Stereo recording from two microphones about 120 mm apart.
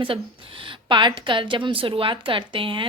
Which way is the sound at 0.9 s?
40° right (ahead or behind).